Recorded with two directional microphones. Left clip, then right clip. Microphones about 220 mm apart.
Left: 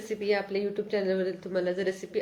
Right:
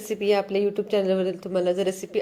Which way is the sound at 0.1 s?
35° right (ahead or behind).